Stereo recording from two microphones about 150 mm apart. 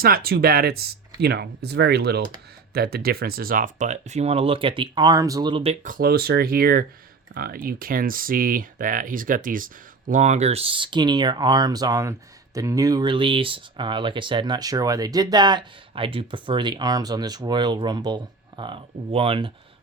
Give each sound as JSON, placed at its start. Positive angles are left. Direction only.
{"t": 0.0, "sound": "speech", "side_deg": -85}
{"t": 5.8, "sound": "speech", "side_deg": -75}